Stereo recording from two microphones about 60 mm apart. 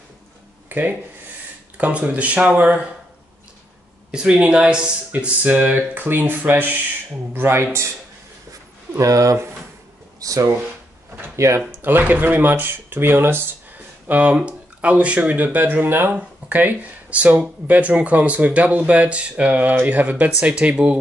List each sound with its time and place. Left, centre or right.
0.7 s speech: right
1.8 s speech: right
4.1 s speech: centre
5.1 s speech: right
5.8 s speech: right
7.3 s speech: right
8.5 s a sound: right
10.2 s speech: right
11.3 s speech: right
11.8 s speech: right